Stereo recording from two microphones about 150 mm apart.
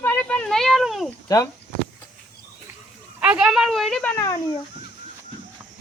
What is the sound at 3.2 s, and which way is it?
Speech, 5° right (ahead or behind).